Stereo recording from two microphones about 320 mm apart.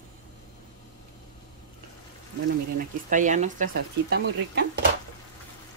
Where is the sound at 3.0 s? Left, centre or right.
Right.